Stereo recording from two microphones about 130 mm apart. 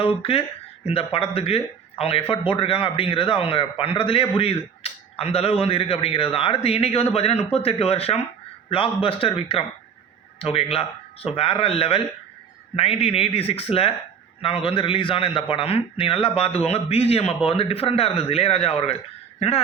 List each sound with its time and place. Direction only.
0.0 s a man's voice: 45° left (ahead or behind)